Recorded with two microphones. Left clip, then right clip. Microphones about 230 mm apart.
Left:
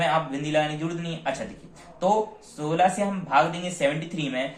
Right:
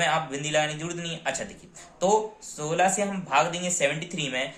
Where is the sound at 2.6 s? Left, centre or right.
Right.